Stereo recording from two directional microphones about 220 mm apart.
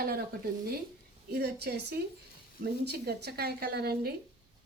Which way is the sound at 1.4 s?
45° right (ahead or behind).